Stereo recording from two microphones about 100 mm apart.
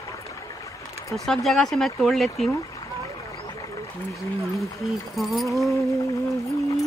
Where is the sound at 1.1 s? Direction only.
Centre (ahead or behind).